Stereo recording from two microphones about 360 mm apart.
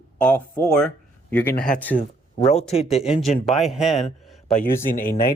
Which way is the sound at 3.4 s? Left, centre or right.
Centre.